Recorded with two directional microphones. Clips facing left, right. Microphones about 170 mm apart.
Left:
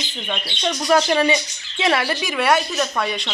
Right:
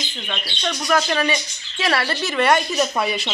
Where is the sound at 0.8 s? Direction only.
25° left (ahead or behind); by 2.6 s 5° left (ahead or behind).